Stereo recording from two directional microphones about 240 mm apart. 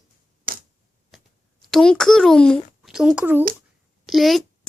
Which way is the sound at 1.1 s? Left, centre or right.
Centre.